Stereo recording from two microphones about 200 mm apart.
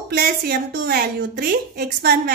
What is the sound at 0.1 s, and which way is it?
A woman's voice, 50° right (ahead or behind).